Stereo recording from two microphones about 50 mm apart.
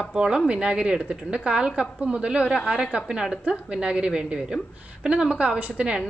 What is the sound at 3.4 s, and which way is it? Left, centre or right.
A woman's voice, right.